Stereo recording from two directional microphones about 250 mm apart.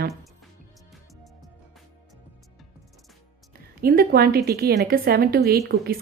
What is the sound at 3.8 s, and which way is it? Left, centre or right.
A woman's voice, right.